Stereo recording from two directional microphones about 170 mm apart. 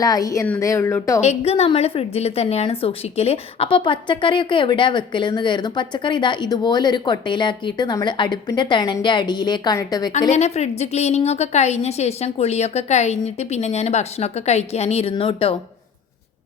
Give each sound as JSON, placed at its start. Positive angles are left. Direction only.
{"t": 0.0, "sound": "a woman's voice", "side_deg": 20}
{"t": 1.2, "sound": "a woman's voice", "side_deg": 40}
{"t": 10.3, "sound": "a woman's voice", "side_deg": 40}